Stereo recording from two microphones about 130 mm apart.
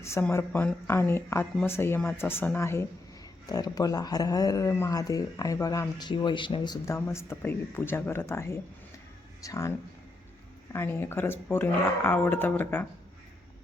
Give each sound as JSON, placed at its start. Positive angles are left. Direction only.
{"t": 0.0, "sound": "speech", "side_deg": 15}
{"t": 6.8, "sound": "speech", "side_deg": 20}